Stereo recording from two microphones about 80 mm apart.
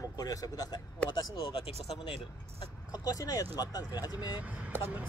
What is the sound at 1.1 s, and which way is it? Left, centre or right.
Speech, left.